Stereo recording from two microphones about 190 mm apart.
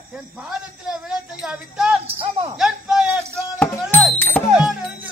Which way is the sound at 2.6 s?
5° right (ahead or behind).